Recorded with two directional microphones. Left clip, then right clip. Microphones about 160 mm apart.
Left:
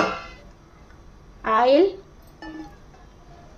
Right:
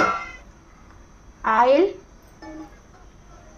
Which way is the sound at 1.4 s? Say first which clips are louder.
Right 1 dB; 55° left (ahead or behind).